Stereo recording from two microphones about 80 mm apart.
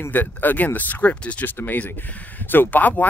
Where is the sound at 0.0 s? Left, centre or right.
Left.